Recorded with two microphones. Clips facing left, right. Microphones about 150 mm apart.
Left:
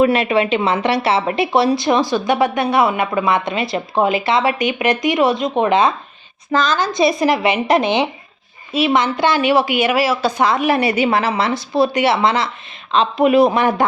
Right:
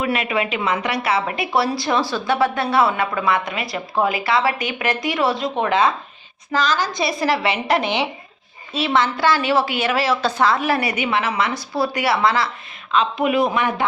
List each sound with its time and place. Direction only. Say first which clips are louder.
0.0 s speech: left 7 dB; 30° left (ahead or behind)
12.9 s a man's voice: left 5 dB; 35° left (ahead or behind)